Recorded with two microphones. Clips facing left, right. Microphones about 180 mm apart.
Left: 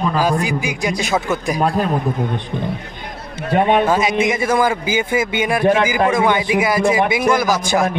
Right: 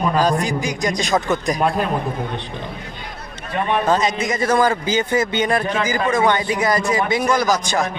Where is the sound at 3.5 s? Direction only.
80° left.